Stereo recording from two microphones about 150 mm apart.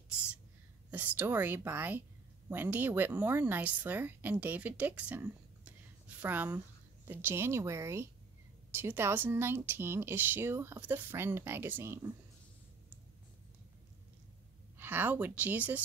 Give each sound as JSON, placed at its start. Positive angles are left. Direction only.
{"t": 0.8, "sound": "a woman's voice", "side_deg": -10}
{"t": 14.8, "sound": "speech", "side_deg": -10}